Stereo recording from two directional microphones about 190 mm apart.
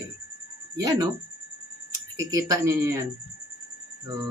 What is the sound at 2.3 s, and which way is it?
Speech, 15° right (ahead or behind).